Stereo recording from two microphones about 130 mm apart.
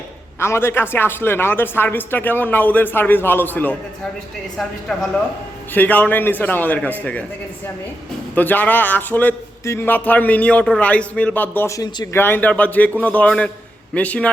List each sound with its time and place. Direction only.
0.3 s a man's voice: 20° left (ahead or behind)
4.9 s a man's voice: 5° left (ahead or behind)
8.4 s a man's voice: 15° left (ahead or behind)
12.2 s a man's voice: 15° left (ahead or behind)